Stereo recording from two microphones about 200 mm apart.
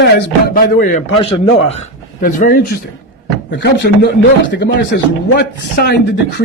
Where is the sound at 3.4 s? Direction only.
55° left (ahead or behind).